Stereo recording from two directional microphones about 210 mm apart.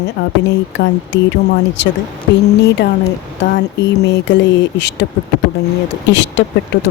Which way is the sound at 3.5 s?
55° left (ahead or behind).